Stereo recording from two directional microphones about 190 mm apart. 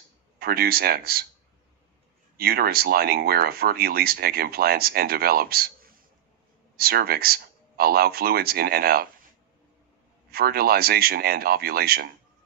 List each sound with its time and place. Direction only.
0.4 s speech: 55° right (ahead or behind)
2.3 s speech: 55° right (ahead or behind)
10.3 s speech: 55° right (ahead or behind)